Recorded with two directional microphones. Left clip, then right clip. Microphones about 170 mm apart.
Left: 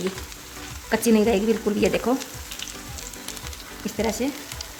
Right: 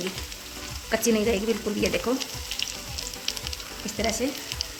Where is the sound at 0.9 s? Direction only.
55° left (ahead or behind).